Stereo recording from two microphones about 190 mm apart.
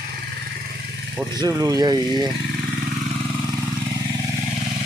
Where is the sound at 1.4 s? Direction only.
20° right (ahead or behind).